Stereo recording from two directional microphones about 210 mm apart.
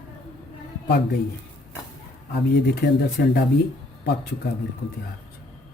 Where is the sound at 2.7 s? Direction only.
50° left (ahead or behind).